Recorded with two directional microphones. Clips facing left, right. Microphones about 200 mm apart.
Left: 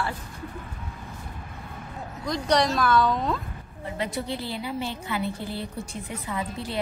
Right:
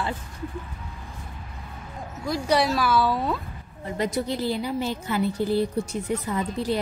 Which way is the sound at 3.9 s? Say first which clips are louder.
Right 4 dB; 40° right (ahead or behind).